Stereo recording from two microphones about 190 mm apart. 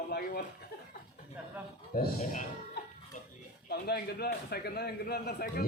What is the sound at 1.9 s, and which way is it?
Speech, 45° left (ahead or behind).